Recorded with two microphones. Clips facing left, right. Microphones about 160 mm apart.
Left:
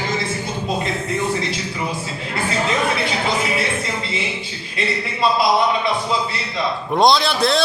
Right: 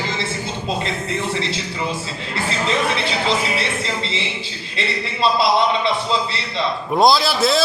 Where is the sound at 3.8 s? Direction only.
30° right (ahead or behind).